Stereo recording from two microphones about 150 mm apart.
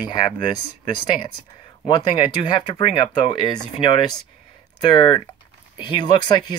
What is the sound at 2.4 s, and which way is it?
Speech, 35° left (ahead or behind).